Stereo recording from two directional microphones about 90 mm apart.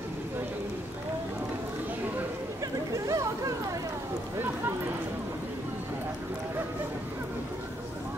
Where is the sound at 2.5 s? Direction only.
40° right (ahead or behind).